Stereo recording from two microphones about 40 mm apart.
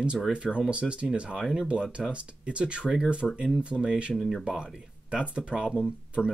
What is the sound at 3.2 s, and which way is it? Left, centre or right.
Speech, centre.